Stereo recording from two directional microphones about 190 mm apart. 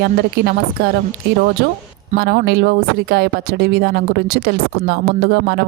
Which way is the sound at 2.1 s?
55° right (ahead or behind).